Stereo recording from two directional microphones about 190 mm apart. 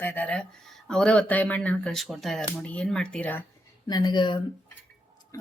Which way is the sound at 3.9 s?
20° left (ahead or behind).